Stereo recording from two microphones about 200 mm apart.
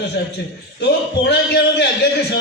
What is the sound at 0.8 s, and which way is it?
A man's voice, 55° left (ahead or behind).